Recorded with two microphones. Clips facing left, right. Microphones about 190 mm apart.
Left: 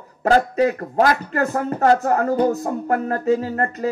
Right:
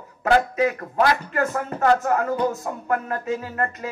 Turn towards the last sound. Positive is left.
turn(degrees=40)  # may be behind; listen again after turning